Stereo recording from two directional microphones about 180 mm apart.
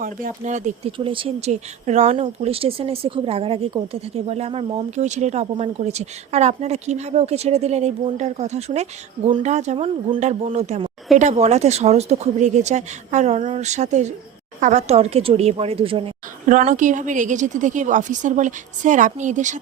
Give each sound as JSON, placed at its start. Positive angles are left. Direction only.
{"t": 0.0, "sound": "a woman's voice", "side_deg": -45}
{"t": 0.9, "sound": "speech", "side_deg": -30}
{"t": 16.5, "sound": "a woman's voice", "side_deg": -45}